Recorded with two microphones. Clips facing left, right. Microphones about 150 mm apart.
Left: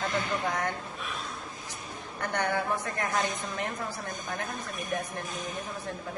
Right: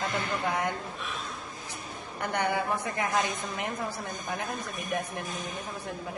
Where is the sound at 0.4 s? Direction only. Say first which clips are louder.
Right 1 dB; 15° right (ahead or behind).